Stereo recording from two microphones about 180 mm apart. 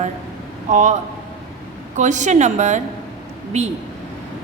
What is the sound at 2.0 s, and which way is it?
A woman's voice, 40° right (ahead or behind).